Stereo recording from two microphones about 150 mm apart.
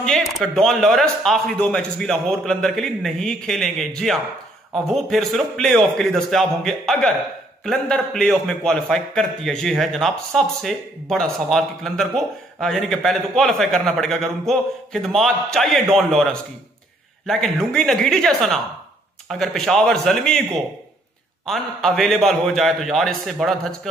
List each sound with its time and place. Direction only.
0.0 s a man's voice: centre (ahead or behind)
21.5 s a man's voice: centre (ahead or behind)